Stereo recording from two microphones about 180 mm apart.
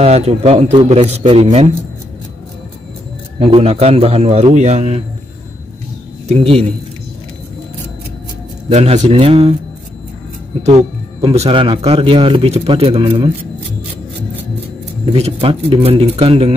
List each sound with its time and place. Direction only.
0.0 s speech: 35° right (ahead or behind)
3.3 s speech: 30° right (ahead or behind)
6.2 s speech: 35° right (ahead or behind)
8.6 s speech: 35° right (ahead or behind)
10.8 s speech: 30° right (ahead or behind)
15.1 s speech: 35° right (ahead or behind)